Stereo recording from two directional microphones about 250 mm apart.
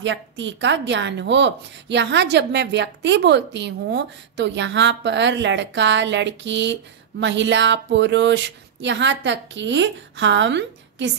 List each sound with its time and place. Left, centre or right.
0.0 s a woman's voice: right